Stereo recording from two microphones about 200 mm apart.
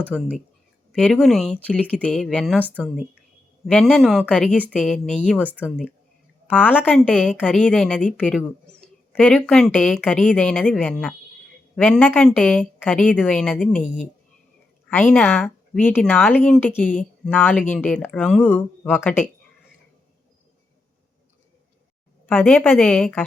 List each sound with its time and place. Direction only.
0.1 s a woman's voice: centre (ahead or behind)
2.6 s a woman's voice: 5° right (ahead or behind)
6.5 s a woman's voice: 10° left (ahead or behind)
13.8 s speech: 40° left (ahead or behind)
14.8 s speech: 5° left (ahead or behind)
22.3 s speech: 10° left (ahead or behind)